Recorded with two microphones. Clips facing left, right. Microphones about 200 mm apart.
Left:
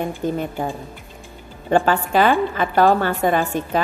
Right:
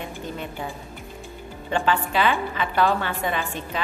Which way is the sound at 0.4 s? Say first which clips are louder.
Left 7 dB; 45° left (ahead or behind).